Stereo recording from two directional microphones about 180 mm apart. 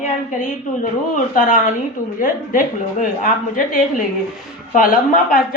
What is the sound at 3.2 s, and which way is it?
Speech, 50° left (ahead or behind).